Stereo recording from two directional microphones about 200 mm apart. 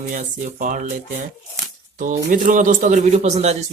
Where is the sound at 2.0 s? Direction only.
40° right (ahead or behind).